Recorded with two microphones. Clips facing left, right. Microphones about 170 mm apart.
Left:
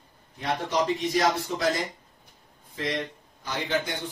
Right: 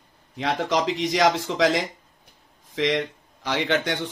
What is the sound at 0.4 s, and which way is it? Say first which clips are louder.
Speech: right 3 dB; 90° right.